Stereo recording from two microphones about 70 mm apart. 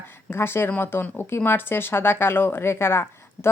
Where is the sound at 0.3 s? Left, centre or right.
Left.